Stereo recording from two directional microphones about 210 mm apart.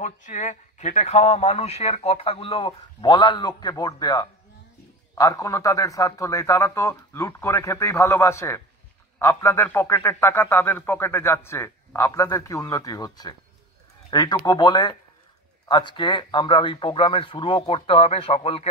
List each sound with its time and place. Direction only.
0.0 s a man's voice: 35° left (ahead or behind)